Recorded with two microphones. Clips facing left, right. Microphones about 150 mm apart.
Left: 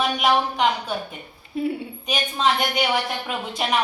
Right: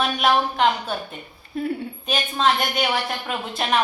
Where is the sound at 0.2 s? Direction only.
15° left (ahead or behind).